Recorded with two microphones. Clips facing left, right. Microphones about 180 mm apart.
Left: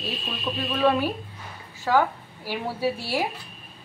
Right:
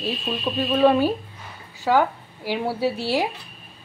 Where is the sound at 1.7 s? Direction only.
15° right (ahead or behind).